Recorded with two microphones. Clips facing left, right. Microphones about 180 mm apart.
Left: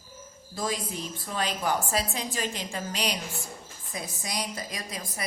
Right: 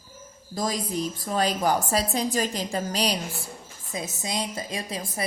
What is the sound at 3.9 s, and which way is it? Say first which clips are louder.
A woman's voice: right 4 dB; 25° right (ahead or behind).